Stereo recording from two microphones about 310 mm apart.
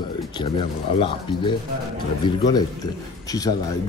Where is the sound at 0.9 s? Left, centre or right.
Centre.